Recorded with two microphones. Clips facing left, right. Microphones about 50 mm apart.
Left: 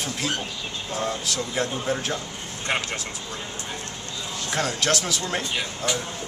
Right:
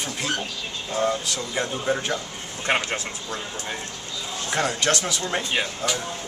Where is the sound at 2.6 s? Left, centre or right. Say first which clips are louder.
Right 3 dB; right.